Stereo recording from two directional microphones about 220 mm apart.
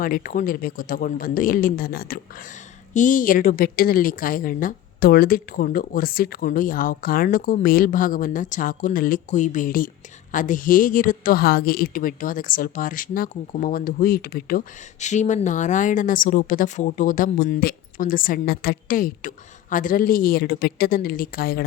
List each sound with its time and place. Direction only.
0.0 s a woman's voice: 40° left (ahead or behind)